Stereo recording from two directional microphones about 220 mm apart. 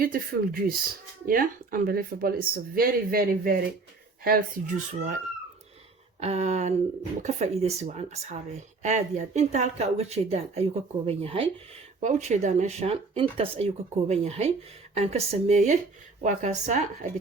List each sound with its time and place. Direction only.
0.0 s a woman's voice: 40° right (ahead or behind)